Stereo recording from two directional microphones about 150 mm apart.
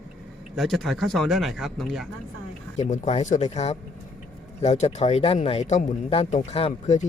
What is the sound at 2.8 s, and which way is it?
Speech, 50° left (ahead or behind).